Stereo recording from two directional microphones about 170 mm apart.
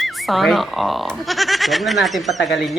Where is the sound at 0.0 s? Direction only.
Centre (ahead or behind).